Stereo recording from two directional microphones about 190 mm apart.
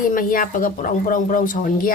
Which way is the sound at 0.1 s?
45° left (ahead or behind).